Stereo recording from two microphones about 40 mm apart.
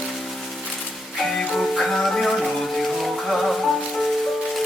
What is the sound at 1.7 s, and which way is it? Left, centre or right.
Music, centre.